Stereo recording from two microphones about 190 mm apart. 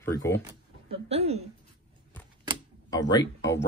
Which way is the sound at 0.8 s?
30° right (ahead or behind).